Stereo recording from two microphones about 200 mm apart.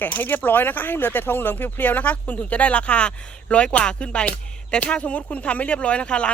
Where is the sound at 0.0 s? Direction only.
10° left (ahead or behind).